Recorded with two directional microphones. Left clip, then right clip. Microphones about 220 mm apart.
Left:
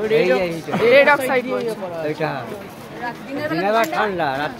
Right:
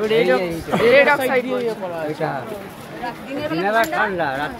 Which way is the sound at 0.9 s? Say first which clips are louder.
Left 2 dB; 10° left (ahead or behind).